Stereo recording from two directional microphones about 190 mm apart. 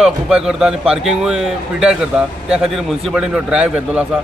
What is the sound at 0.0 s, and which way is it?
A man's voice, 5° right (ahead or behind).